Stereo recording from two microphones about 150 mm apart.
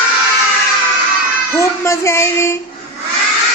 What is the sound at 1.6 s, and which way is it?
Speech, 20° left (ahead or behind).